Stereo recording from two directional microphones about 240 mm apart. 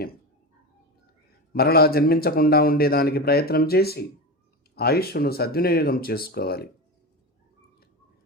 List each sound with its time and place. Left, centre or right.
1.5 s a man's voice: left